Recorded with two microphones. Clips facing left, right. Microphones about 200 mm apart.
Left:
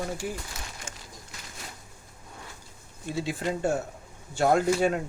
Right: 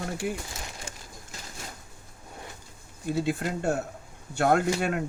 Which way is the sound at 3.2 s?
60° right (ahead or behind).